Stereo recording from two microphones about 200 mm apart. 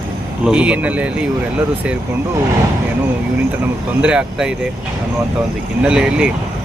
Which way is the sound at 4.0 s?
5° right (ahead or behind).